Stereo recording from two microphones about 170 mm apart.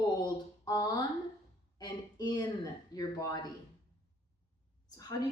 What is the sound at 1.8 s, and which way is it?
Speech, 20° left (ahead or behind).